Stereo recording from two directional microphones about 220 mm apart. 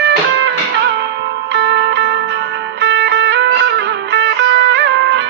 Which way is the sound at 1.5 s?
50° right (ahead or behind).